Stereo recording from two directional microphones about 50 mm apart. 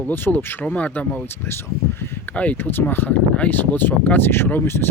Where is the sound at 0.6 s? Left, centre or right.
Left.